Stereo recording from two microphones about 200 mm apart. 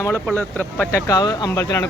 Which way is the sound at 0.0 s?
10° left (ahead or behind).